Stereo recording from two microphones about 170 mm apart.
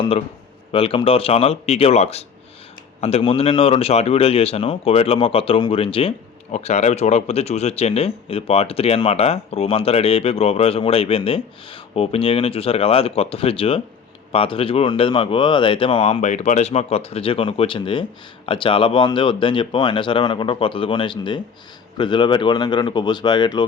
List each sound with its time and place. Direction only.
0.7 s a man's voice: 30° left (ahead or behind)